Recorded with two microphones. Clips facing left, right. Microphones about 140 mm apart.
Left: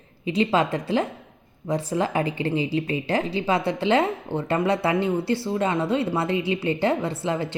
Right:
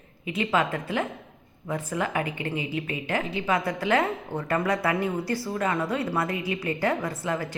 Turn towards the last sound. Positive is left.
turn(degrees=25)  # may be behind; listen again after turning